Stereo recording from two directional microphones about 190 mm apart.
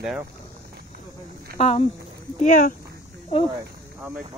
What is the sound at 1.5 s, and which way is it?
Speech, 35° left (ahead or behind).